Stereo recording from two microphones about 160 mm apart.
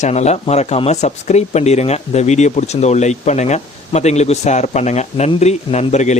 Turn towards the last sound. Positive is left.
turn(degrees=45)  # may be behind; listen again after turning